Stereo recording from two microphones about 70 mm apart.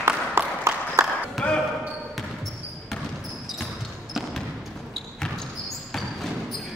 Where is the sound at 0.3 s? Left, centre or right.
Right.